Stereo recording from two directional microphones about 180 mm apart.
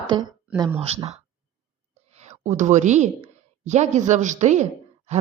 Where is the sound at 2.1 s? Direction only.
40° right (ahead or behind).